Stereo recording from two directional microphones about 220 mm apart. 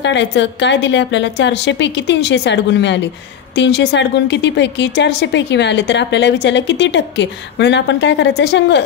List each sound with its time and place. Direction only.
0.0 s a woman's voice: 50° left (ahead or behind)